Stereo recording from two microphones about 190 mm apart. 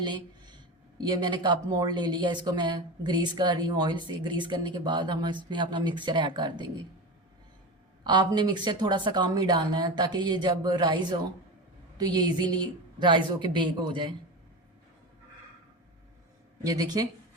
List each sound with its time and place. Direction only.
0.9 s speech: 20° right (ahead or behind)
8.0 s speech: 25° right (ahead or behind)
16.6 s speech: 20° right (ahead or behind)